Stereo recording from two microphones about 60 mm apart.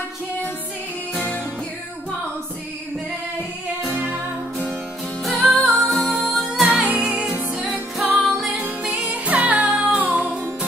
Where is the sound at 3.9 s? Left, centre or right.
Right.